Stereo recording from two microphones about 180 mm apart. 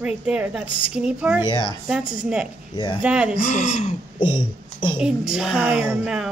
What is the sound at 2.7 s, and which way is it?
Speech, 25° left (ahead or behind).